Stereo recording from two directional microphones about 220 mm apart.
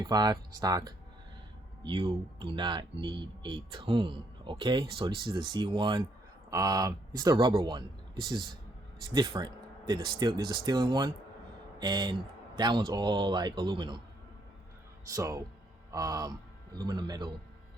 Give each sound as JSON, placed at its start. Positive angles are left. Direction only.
{"t": 0.0, "sound": "speech", "side_deg": -20}
{"t": 15.1, "sound": "speech", "side_deg": -15}